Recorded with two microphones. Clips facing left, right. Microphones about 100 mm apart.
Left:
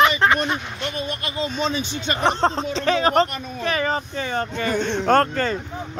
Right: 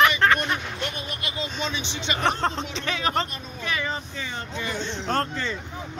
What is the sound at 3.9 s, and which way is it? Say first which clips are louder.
Speech: left 7 dB; 50° left (ahead or behind).